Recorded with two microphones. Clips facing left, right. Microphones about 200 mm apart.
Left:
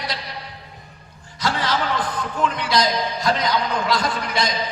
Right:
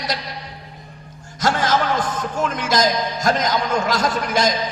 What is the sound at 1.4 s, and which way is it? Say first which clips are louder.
A man's voice: right 4 dB; 45° right (ahead or behind).